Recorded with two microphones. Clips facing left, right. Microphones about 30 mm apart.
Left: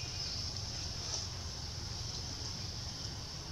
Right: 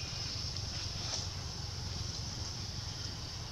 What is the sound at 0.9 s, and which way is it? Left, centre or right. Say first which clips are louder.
Vehicle: right 2 dB; right.